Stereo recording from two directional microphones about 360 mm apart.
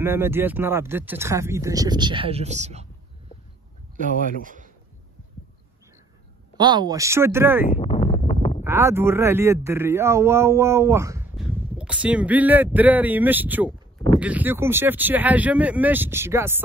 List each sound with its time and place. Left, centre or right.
0.0 s speech: centre
4.0 s speech: right
6.5 s speech: centre
7.6 s a sound: centre
8.6 s speech: centre